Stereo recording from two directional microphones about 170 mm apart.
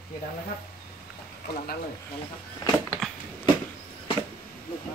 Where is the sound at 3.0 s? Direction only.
Centre (ahead or behind).